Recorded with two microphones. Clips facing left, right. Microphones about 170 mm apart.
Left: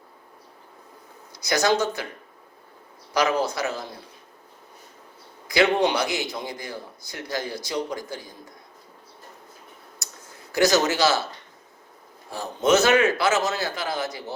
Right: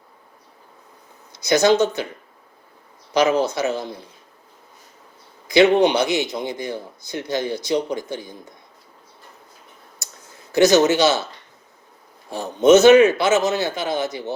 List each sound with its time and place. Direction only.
1.3 s speech: 25° right (ahead or behind)
3.1 s a man's voice: 25° right (ahead or behind)
5.5 s a man's voice: 20° right (ahead or behind)
10.5 s a man's voice: 20° right (ahead or behind)
12.3 s a man's voice: 20° right (ahead or behind)